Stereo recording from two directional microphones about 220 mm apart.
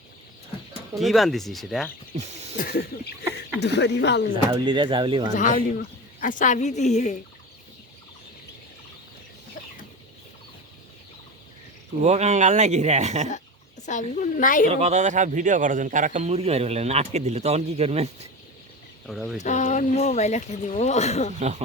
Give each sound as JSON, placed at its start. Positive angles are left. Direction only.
{"t": 0.9, "sound": "speech", "side_deg": 0}
{"t": 2.1, "sound": "speech", "side_deg": -30}
{"t": 2.6, "sound": "speech", "side_deg": 45}
{"t": 4.5, "sound": "a man's voice", "side_deg": -20}
{"t": 5.3, "sound": "speech", "side_deg": 35}
{"t": 12.0, "sound": "speech", "side_deg": -30}
{"t": 13.8, "sound": "speech", "side_deg": 30}
{"t": 14.7, "sound": "a man's voice", "side_deg": -30}
{"t": 19.0, "sound": "speech", "side_deg": 0}
{"t": 19.4, "sound": "speech", "side_deg": 30}
{"t": 21.3, "sound": "speech", "side_deg": -30}